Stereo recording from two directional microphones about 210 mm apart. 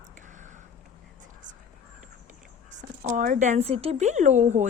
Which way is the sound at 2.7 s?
35° right (ahead or behind).